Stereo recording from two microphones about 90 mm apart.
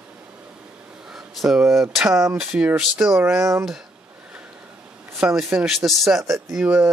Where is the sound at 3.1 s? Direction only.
30° right (ahead or behind).